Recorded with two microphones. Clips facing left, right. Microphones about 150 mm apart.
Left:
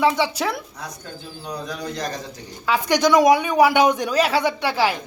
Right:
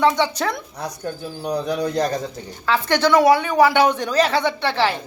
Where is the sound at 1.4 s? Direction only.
65° right (ahead or behind).